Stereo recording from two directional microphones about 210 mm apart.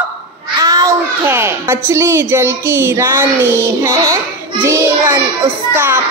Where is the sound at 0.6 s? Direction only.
15° right (ahead or behind).